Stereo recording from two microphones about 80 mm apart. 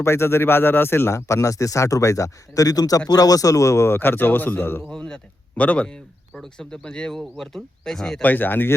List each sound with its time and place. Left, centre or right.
0.0 s speech: left
4.9 s speech: centre
8.2 s speech: left